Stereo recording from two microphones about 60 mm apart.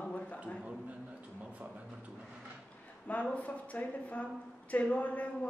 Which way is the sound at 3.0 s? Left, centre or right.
Left.